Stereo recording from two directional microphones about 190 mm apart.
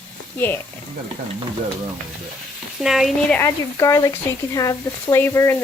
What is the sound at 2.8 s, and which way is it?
Speech, centre (ahead or behind).